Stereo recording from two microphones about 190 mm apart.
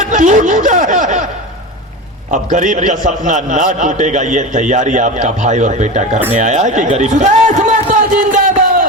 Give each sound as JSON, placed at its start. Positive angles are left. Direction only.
{"t": 0.0, "sound": "speech", "side_deg": -40}
{"t": 2.3, "sound": "a man's voice", "side_deg": -40}
{"t": 6.1, "sound": "speech", "side_deg": -10}
{"t": 6.4, "sound": "a man's voice", "side_deg": -40}
{"t": 8.1, "sound": "a sound", "side_deg": -45}